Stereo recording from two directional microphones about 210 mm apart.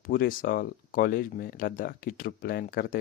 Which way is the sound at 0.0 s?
40° left (ahead or behind).